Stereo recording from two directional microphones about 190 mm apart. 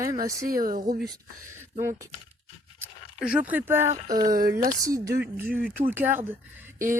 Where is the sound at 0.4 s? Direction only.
50° right (ahead or behind).